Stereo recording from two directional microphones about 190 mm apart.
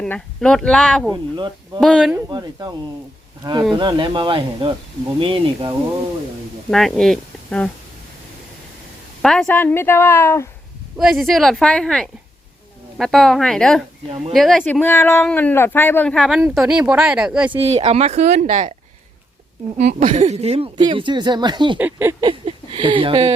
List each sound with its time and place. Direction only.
0.0 s speech: 5° left (ahead or behind)
1.1 s speech: 25° right (ahead or behind)
1.8 s speech: centre (ahead or behind)
2.1 s speech: 20° right (ahead or behind)
6.7 s speech: centre (ahead or behind)
9.2 s speech: centre (ahead or behind)
10.9 s speech: centre (ahead or behind)
17.5 s speech: 30° right (ahead or behind)
20.1 s speech: 35° right (ahead or behind)
21.8 s speech: 10° right (ahead or behind)
22.3 s speech: 25° right (ahead or behind)